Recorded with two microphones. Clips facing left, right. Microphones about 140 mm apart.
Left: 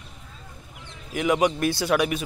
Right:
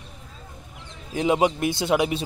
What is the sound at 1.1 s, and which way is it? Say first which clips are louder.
Speech: right 1 dB; 25° right (ahead or behind).